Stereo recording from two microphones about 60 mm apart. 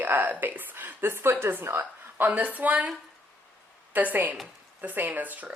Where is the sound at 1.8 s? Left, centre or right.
Right.